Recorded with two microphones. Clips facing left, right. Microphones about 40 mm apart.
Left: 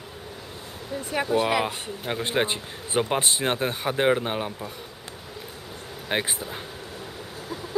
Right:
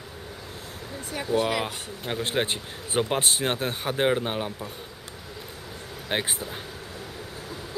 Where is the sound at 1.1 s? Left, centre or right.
Left.